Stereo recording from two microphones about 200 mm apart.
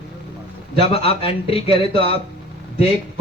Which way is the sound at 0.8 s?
30° left (ahead or behind).